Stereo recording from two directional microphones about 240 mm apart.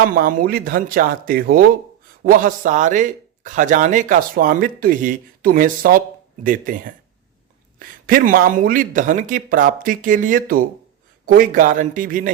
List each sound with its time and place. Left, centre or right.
0.0 s speech: right